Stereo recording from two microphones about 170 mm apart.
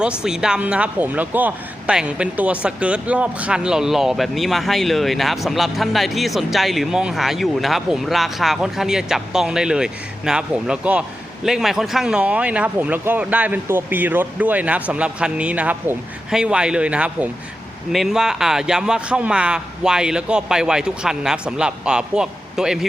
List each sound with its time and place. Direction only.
0.2 s speech: 5° right (ahead or behind)